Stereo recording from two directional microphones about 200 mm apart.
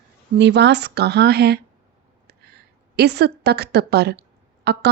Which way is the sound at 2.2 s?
55° right (ahead or behind).